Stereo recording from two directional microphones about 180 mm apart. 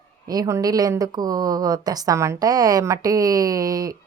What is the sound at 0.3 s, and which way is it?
A woman's voice, 20° right (ahead or behind).